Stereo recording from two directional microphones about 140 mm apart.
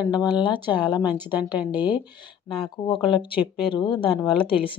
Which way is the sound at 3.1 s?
35° left (ahead or behind).